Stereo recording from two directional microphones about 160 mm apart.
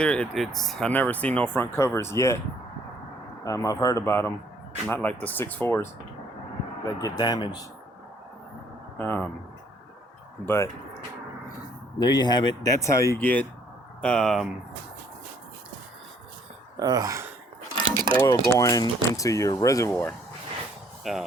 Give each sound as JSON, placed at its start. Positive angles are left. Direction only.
{"t": 0.0, "sound": "speech", "side_deg": 5}
{"t": 3.4, "sound": "speech", "side_deg": 20}
{"t": 9.0, "sound": "speech", "side_deg": 10}
{"t": 10.4, "sound": "speech", "side_deg": 15}
{"t": 11.9, "sound": "speech", "side_deg": 25}
{"t": 16.8, "sound": "speech", "side_deg": -20}
{"t": 17.9, "sound": "mechanisms", "side_deg": -30}
{"t": 18.2, "sound": "speech", "side_deg": 20}
{"t": 21.0, "sound": "speech", "side_deg": 0}